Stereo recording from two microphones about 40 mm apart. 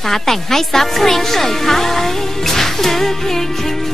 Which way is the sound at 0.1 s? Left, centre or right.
Centre.